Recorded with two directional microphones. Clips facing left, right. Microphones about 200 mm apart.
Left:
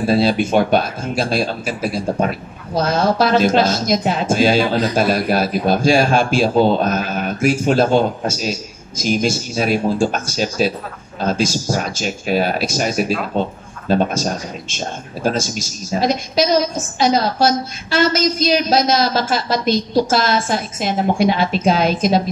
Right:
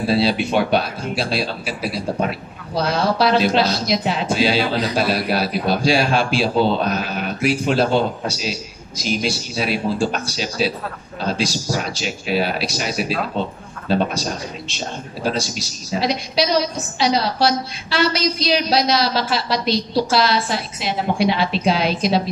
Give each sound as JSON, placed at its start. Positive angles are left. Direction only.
{"t": 0.0, "sound": "a man's voice", "side_deg": 45}